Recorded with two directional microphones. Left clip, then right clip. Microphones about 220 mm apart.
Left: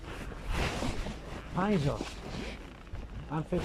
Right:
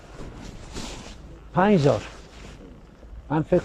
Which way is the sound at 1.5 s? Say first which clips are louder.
Right 13 dB; 45° right (ahead or behind).